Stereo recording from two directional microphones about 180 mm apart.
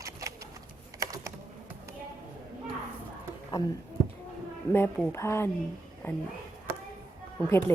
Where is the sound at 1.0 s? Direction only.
20° right (ahead or behind).